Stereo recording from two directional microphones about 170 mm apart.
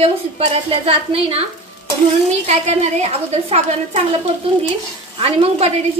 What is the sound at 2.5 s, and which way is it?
A woman's voice, 40° right (ahead or behind).